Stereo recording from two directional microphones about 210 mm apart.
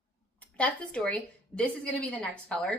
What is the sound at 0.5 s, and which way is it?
A woman's voice, 5° left (ahead or behind).